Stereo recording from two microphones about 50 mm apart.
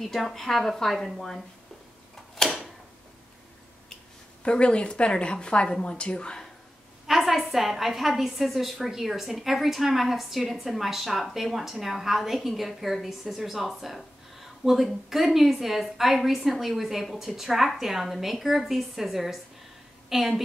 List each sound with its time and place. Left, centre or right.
0.0 s a woman's voice: centre
2.4 s tick-tock: centre
4.4 s a woman's voice: left
7.1 s a woman's voice: centre